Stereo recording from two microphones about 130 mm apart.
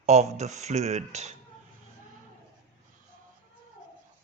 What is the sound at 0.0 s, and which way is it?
Speech, 60° right (ahead or behind).